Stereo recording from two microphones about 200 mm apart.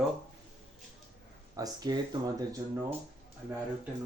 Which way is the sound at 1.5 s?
20° right (ahead or behind).